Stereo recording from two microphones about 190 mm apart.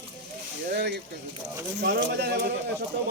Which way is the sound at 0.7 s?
60° right (ahead or behind).